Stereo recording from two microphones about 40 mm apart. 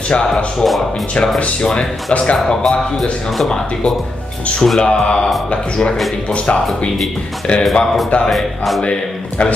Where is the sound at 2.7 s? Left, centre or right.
Centre.